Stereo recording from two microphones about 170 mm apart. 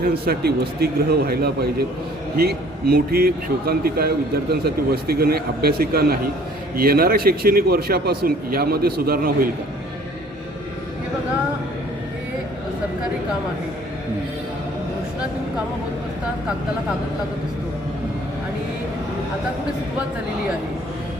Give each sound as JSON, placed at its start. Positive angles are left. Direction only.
{"t": 0.0, "sound": "a man's voice", "side_deg": -65}